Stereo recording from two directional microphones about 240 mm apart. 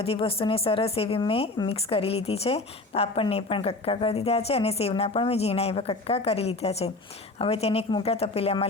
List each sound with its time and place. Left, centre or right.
0.0 s a woman's voice: left